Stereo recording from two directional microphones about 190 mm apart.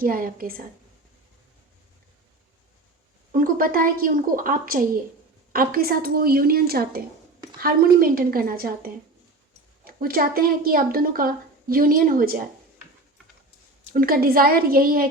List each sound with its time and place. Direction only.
0.0 s a woman's voice: 50° right (ahead or behind)
3.3 s a woman's voice: 50° right (ahead or behind)
13.9 s a woman's voice: 50° right (ahead or behind)